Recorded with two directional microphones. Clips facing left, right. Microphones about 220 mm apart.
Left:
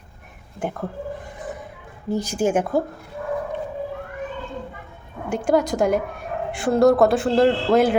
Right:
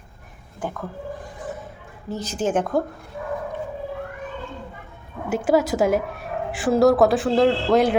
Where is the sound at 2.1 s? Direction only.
10° left (ahead or behind).